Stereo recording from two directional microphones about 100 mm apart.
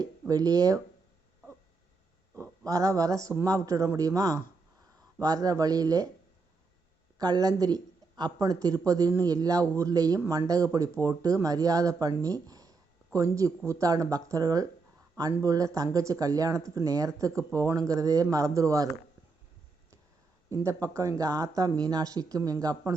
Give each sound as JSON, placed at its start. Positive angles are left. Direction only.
{"t": 0.0, "sound": "speech", "side_deg": -40}
{"t": 2.6, "sound": "speech", "side_deg": -35}
{"t": 7.2, "sound": "speech", "side_deg": -40}
{"t": 20.7, "sound": "speech", "side_deg": -35}